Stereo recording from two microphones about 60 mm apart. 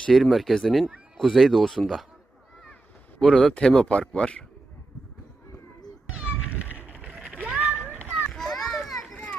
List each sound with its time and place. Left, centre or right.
0.1 s speech: centre
3.2 s a man's voice: centre
6.1 s a sound: right
8.3 s children playing: centre